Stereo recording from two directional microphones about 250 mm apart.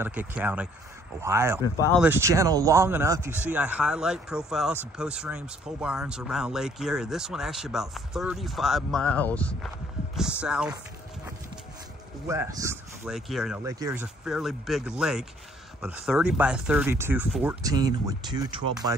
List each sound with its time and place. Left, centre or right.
0.0 s speech: centre
1.6 s speech: centre
2.0 s speech: centre
12.3 s speech: centre
13.7 s speech: centre